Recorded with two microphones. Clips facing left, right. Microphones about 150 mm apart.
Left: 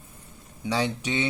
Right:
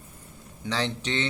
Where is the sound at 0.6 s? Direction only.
10° left (ahead or behind).